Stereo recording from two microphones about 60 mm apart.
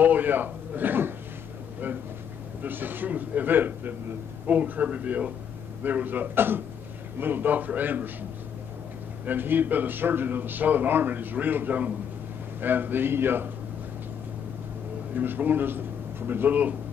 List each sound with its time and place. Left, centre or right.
0.0 s speech: right
2.6 s a man's voice: right
9.2 s a man's voice: right
15.1 s speech: right